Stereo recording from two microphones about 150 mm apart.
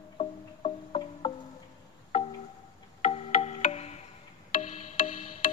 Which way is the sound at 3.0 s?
40° left (ahead or behind).